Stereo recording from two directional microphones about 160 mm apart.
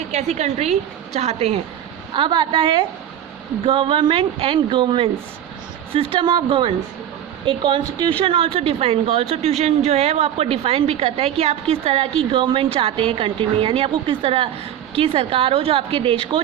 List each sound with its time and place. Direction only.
0.1 s a woman's voice: 45° right (ahead or behind)
2.1 s a woman's voice: 30° right (ahead or behind)